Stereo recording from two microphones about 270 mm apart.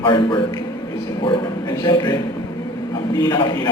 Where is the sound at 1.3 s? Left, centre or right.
Centre.